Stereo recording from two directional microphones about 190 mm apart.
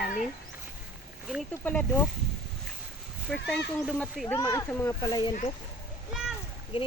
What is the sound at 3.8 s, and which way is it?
Speech, centre (ahead or behind).